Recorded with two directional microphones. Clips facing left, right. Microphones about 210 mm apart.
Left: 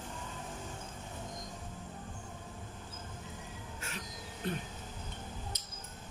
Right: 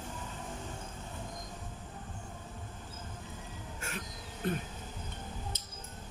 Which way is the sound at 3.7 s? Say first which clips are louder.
Right 4 dB; 50° right (ahead or behind).